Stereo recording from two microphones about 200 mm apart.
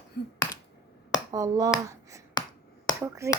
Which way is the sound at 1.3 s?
15° right (ahead or behind).